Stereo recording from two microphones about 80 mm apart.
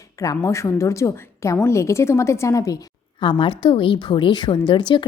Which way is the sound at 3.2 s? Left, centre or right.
Left.